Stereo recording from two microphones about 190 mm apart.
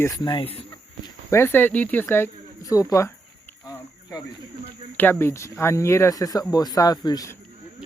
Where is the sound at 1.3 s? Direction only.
10° left (ahead or behind).